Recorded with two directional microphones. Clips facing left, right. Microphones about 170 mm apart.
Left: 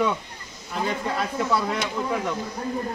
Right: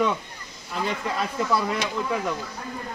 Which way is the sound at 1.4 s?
Centre (ahead or behind).